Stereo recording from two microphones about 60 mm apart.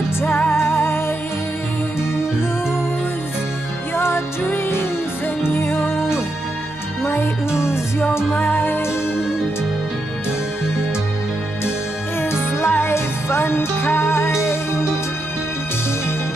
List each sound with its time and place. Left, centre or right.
0.5 s music: left
3.9 s music: left
7.1 s music: left
8.3 s music: left
8.5 s music: left
12.2 s music: left